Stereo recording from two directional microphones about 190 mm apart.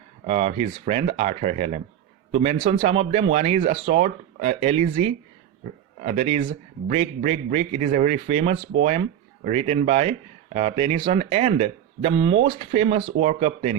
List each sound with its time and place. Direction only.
0.3 s speech: 35° right (ahead or behind)
6.2 s speech: 30° right (ahead or behind)